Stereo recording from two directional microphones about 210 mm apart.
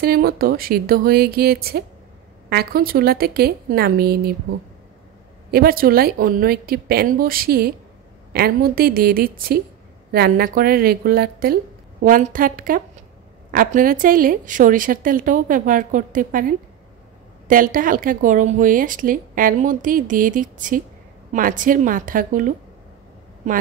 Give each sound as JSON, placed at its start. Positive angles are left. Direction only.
{"t": 0.0, "sound": "speech", "side_deg": -45}
{"t": 5.5, "sound": "a woman's voice", "side_deg": -45}